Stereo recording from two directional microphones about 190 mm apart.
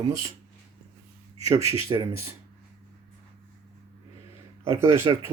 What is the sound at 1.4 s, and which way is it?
Speech, 15° right (ahead or behind).